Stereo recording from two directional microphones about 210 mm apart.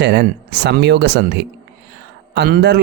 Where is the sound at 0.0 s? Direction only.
55° right (ahead or behind).